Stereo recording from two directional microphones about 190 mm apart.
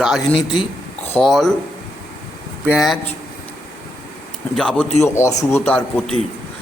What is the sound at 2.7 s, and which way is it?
Speech, centre (ahead or behind).